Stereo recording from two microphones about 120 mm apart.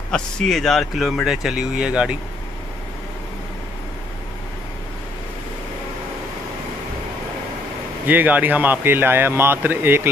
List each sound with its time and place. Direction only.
0.1 s speech: 5° left (ahead or behind)
8.1 s speech: 15° right (ahead or behind)